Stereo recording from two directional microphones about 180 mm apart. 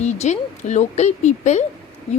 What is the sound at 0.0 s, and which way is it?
A woman's voice, 40° left (ahead or behind).